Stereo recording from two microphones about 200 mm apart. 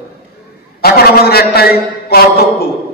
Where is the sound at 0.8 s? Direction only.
50° left (ahead or behind).